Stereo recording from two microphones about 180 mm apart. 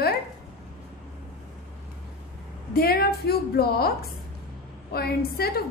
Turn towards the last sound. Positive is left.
turn(degrees=60)  # may be behind; listen again after turning